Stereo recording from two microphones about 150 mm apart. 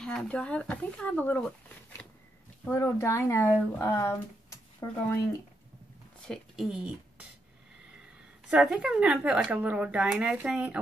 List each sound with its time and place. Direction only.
0.0 s speech: 5° left (ahead or behind)
6.2 s speech: centre (ahead or behind)
8.5 s speech: 5° right (ahead or behind)